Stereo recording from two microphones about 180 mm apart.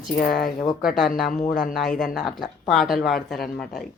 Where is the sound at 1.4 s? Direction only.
50° left (ahead or behind).